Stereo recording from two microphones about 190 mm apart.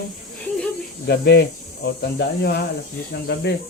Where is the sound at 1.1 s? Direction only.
60° left (ahead or behind).